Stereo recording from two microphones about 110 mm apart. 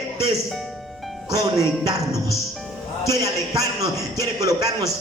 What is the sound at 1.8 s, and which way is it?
A man's voice, 30° right (ahead or behind).